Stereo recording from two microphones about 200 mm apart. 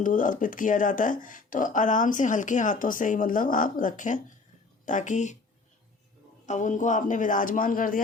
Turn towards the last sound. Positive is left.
turn(degrees=45)  # may be behind; listen again after turning